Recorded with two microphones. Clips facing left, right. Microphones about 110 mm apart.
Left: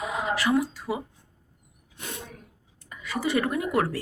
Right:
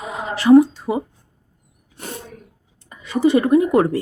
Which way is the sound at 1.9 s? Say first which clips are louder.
Right 6 dB; 35° right (ahead or behind).